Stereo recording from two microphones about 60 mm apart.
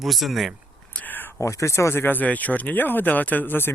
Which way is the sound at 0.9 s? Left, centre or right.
Left.